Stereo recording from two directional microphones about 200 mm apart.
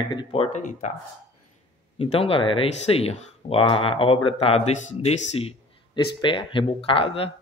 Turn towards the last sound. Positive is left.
turn(degrees=25)  # may be behind; listen again after turning